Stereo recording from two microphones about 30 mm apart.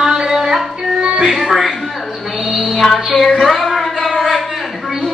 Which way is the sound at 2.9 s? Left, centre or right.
Centre.